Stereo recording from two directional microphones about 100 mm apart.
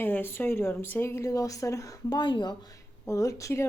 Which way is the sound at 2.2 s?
50° left (ahead or behind).